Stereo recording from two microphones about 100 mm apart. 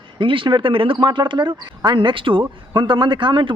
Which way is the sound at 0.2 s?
60° right (ahead or behind).